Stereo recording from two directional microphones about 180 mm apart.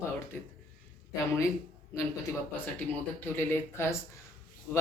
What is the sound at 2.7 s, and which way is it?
Speech, 10° left (ahead or behind).